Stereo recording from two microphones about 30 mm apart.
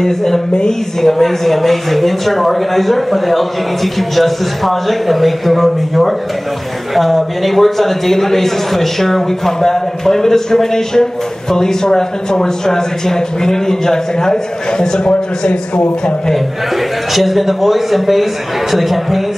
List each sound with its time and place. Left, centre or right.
0.0 s a man's voice: centre
15.0 s speech: left
17.1 s speech: centre